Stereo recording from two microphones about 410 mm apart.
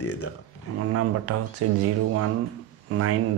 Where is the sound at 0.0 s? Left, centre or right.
Left.